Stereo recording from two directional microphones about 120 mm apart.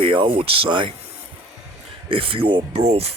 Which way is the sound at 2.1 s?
50° right (ahead or behind).